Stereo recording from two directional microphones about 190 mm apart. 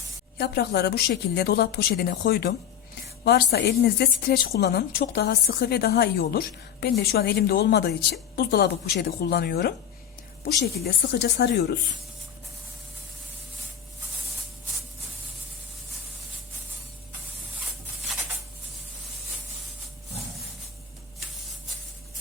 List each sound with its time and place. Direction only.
0.3 s a woman's voice: 60° left (ahead or behind)
11.2 s a woman's voice: 55° left (ahead or behind)